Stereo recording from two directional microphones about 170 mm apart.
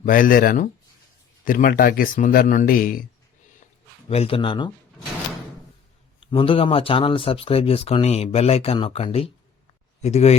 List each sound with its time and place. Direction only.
0.0 s speech: 55° left (ahead or behind)
4.1 s speech: 35° left (ahead or behind)
6.1 s speech: 35° left (ahead or behind)